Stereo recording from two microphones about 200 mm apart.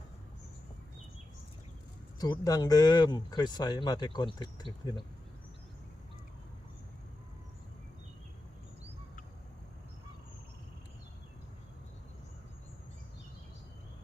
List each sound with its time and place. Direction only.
2.1 s speech: 20° left (ahead or behind)